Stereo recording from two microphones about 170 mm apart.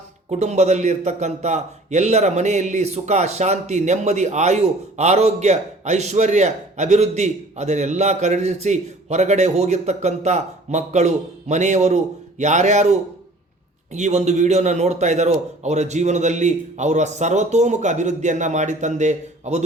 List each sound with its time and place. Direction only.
0.3 s a man's voice: 40° right (ahead or behind)